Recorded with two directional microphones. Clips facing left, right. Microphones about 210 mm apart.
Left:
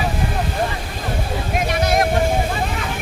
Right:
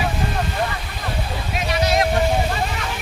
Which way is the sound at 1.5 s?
50° left (ahead or behind).